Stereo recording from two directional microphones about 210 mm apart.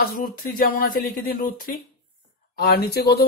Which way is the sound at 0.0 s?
45° left (ahead or behind).